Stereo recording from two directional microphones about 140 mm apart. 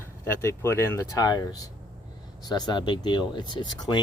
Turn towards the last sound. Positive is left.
turn(degrees=30)  # may be behind; listen again after turning